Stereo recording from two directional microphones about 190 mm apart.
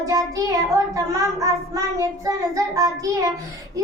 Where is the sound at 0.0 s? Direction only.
20° right (ahead or behind).